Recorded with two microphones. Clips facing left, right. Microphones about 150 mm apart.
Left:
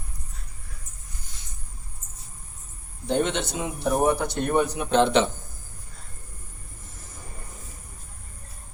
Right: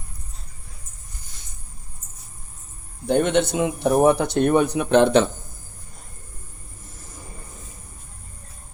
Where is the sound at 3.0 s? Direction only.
55° right (ahead or behind).